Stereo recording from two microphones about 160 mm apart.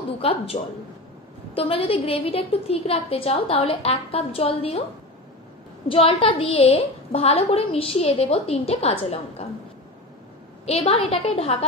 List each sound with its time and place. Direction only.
0.2 s a woman's voice: 35° left (ahead or behind)
1.5 s a woman's voice: 35° left (ahead or behind)
5.9 s a woman's voice: 35° left (ahead or behind)
10.6 s a woman's voice: 40° left (ahead or behind)